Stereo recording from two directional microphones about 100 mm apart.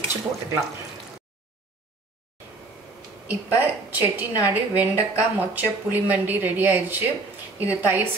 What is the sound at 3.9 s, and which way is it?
A woman's voice, 15° right (ahead or behind).